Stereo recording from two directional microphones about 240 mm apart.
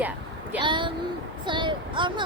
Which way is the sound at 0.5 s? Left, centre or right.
Centre.